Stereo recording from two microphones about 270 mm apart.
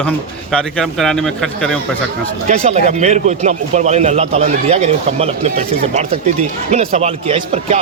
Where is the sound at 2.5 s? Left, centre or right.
Right.